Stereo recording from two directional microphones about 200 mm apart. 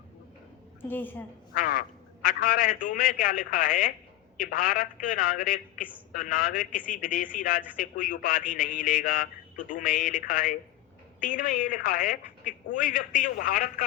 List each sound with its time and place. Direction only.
0.8 s a woman's voice: 10° left (ahead or behind)
1.5 s a man's voice: 45° left (ahead or behind)